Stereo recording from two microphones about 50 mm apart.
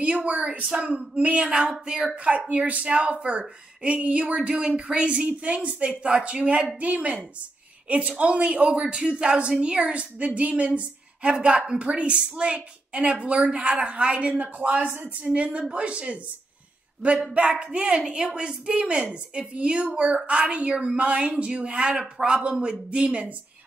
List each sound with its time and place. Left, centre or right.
0.0 s a woman's voice: right
2.0 s a woman's voice: right
17.3 s a woman's voice: right